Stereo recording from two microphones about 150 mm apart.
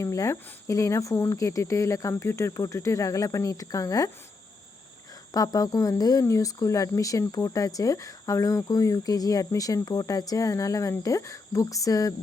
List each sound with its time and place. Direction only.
0.0 s speech: 20° left (ahead or behind)
5.3 s speech: 25° left (ahead or behind)